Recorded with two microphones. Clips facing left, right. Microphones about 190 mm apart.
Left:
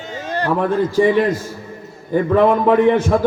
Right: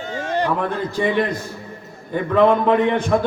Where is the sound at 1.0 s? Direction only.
10° left (ahead or behind).